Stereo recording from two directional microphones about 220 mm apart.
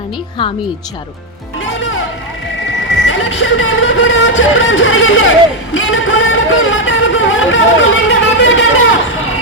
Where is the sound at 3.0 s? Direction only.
55° left (ahead or behind).